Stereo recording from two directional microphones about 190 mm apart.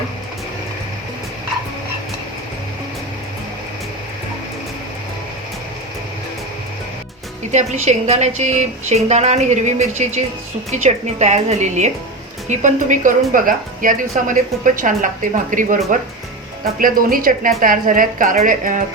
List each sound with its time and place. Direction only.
7.5 s a woman's voice: 35° right (ahead or behind)
16.8 s a woman's voice: 50° right (ahead or behind)